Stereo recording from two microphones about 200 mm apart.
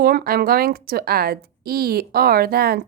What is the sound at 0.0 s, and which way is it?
A woman's voice, 50° right (ahead or behind).